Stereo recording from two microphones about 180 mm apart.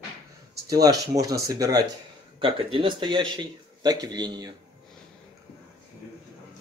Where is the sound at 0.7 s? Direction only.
20° right (ahead or behind).